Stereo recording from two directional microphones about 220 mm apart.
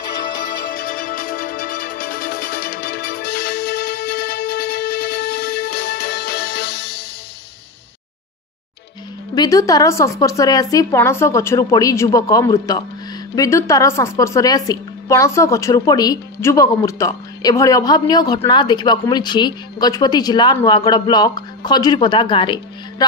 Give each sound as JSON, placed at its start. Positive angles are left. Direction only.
{"t": 0.7, "sound": "music", "side_deg": 40}
{"t": 9.3, "sound": "a woman's voice", "side_deg": 15}